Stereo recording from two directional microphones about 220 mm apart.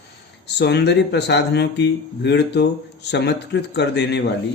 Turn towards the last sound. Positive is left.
turn(degrees=50)  # may be behind; listen again after turning